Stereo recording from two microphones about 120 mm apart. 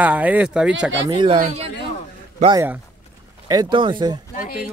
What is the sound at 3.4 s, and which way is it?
Speech, 40° right (ahead or behind).